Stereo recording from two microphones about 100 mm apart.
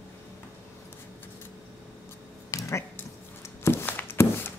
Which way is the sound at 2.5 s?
30° left (ahead or behind).